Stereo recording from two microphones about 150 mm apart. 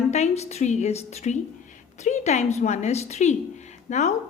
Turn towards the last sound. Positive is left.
turn(degrees=50)  # may be behind; listen again after turning